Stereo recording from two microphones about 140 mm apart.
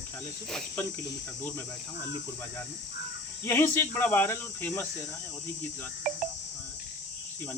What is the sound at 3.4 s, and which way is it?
Speech, 15° left (ahead or behind).